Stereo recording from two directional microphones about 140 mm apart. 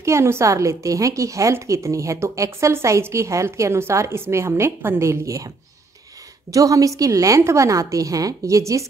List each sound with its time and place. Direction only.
0.0 s speech: 20° right (ahead or behind)
6.5 s speech: 25° right (ahead or behind)